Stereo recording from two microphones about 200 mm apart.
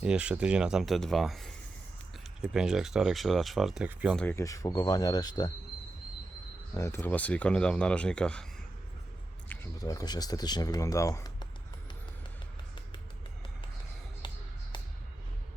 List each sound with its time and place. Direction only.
0.0 s speech: 5° right (ahead or behind)
4.2 s speech: 10° left (ahead or behind)
6.7 s speech: 15° left (ahead or behind)
9.5 s a sound: 5° left (ahead or behind)
9.8 s speech: 20° left (ahead or behind)
14.2 s music: 20° left (ahead or behind)